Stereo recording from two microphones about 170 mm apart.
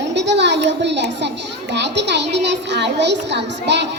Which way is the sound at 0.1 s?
90° right.